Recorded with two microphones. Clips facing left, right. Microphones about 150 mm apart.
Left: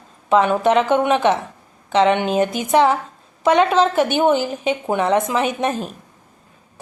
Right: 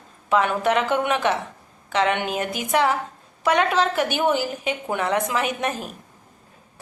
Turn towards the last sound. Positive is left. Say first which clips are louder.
# left 5 dB
turn(degrees=25)  # may be behind; listen again after turning